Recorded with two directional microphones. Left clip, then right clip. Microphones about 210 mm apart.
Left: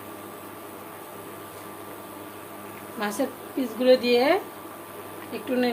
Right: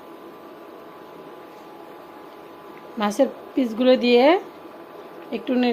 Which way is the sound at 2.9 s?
40° right (ahead or behind).